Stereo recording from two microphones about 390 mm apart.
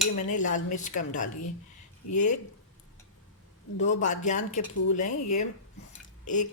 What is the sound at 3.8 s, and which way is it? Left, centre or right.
Speech, centre.